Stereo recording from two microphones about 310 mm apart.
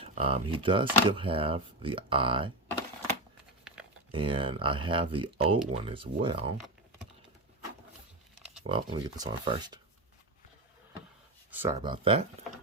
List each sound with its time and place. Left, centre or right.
0.0 s speech: centre
4.1 s speech: centre
8.6 s speech: centre
11.5 s speech: centre